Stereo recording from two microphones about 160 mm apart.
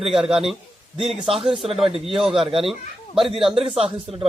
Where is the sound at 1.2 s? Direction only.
35° right (ahead or behind).